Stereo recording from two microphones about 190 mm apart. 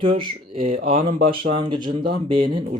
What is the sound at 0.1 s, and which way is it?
Speech, 30° right (ahead or behind).